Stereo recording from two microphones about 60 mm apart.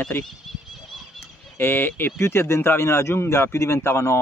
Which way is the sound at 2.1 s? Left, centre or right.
Left.